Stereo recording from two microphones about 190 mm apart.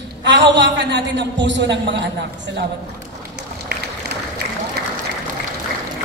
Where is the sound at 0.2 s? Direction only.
70° right (ahead or behind).